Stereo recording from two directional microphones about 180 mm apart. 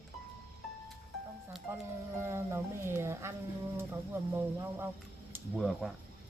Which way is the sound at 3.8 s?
15° right (ahead or behind).